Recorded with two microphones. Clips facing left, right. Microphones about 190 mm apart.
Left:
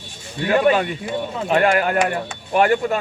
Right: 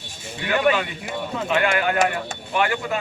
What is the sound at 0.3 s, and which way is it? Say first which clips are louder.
A man's voice: left 4 dB; 35° left (ahead or behind).